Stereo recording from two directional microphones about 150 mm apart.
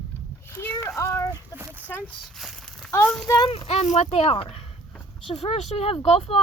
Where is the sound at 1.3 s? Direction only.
20° right (ahead or behind).